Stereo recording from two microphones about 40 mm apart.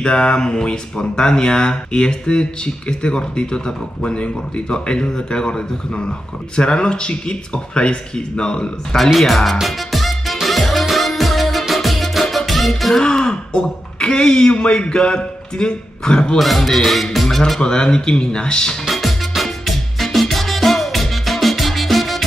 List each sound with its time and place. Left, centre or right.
0.0 s speech: left
8.9 s music: centre
12.9 s speech: centre
16.3 s speech: centre
17.6 s speech: centre
18.9 s music: centre